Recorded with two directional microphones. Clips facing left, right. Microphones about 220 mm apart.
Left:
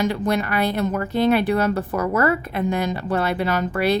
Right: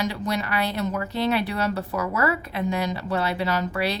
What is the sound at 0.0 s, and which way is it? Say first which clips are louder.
A woman's voice: left 5 dB; 50° left (ahead or behind).